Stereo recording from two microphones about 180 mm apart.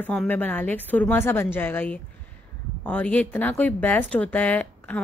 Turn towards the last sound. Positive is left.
turn(degrees=10)  # may be behind; listen again after turning